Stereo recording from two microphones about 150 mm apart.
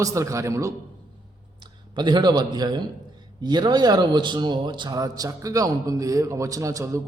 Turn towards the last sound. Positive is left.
turn(degrees=-20)  # may be behind; listen again after turning